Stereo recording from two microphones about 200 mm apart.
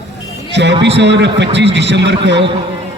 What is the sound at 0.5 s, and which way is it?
A man's voice, 60° right (ahead or behind).